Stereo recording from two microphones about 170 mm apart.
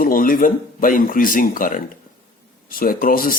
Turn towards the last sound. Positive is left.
turn(degrees=60)  # may be behind; listen again after turning